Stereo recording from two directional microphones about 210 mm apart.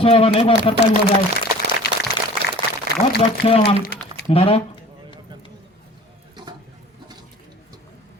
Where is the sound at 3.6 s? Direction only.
50° left (ahead or behind).